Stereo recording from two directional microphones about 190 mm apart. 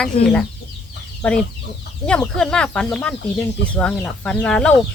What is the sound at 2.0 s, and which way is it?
Speech, 5° left (ahead or behind).